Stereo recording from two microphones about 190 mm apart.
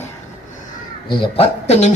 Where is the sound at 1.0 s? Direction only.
30° left (ahead or behind).